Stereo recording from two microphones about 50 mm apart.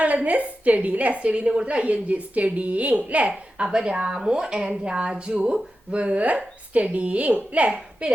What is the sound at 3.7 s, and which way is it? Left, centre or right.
A woman's voice, centre.